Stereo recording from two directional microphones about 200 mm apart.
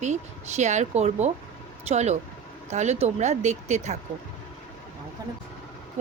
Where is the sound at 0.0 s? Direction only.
35° right (ahead or behind).